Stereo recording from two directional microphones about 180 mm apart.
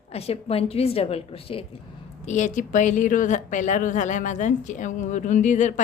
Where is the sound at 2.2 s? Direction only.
40° left (ahead or behind).